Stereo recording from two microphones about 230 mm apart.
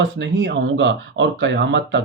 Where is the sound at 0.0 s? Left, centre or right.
Right.